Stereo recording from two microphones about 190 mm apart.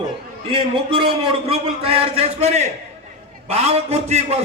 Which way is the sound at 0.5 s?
25° right (ahead or behind).